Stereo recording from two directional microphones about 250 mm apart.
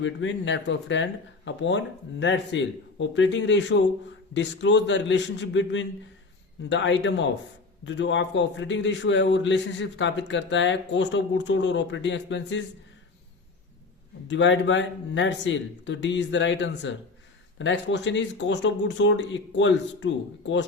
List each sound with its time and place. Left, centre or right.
0.0 s a man's voice: left
14.3 s a man's voice: left